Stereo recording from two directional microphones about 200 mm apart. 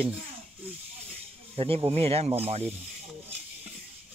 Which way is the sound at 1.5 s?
30° right (ahead or behind).